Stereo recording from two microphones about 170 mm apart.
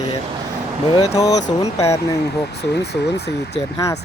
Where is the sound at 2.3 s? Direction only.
75° left (ahead or behind).